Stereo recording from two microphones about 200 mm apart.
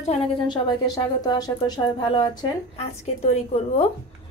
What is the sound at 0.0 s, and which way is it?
A woman's voice, 30° left (ahead or behind).